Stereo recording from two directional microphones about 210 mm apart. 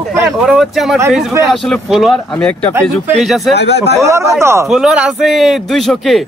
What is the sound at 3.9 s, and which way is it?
Speech, 15° right (ahead or behind).